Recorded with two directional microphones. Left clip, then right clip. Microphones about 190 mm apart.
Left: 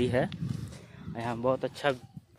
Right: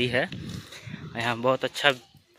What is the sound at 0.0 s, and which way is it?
Speech, 20° left (ahead or behind).